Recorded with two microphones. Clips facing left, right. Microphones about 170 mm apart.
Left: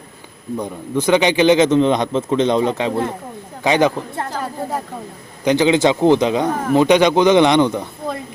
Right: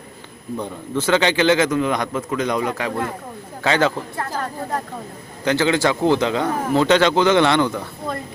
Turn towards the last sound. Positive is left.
turn(degrees=20)  # may be behind; listen again after turning